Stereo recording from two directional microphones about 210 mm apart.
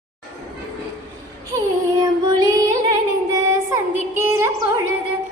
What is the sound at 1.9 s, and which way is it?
Child singing, 20° right (ahead or behind).